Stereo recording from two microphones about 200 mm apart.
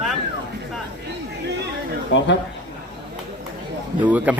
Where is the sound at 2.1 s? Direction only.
65° left (ahead or behind).